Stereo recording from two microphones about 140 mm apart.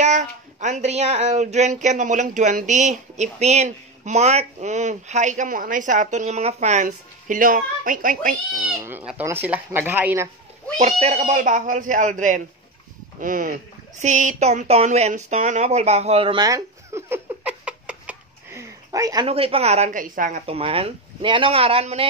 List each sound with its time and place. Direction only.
0.0 s speech: 55° right (ahead or behind); by 8.4 s 75° right (ahead or behind)
9.2 s speech: 15° right (ahead or behind)
10.8 s a woman's voice: 50° right (ahead or behind)
11.2 s speech: 65° right (ahead or behind); by 16.4 s 40° right (ahead or behind)
16.4 s a sound: 20° right (ahead or behind)
18.5 s a sound: 20° right (ahead or behind)
19.2 s a woman's voice: 45° right (ahead or behind); by 20.4 s 70° right (ahead or behind)
20.4 s speech: 45° right (ahead or behind)